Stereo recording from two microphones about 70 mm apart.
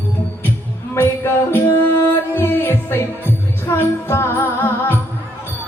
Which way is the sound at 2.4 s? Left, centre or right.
Left.